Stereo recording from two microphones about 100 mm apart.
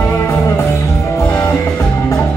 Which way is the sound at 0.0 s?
25° left (ahead or behind).